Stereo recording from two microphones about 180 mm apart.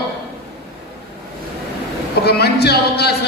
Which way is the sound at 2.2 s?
65° left (ahead or behind).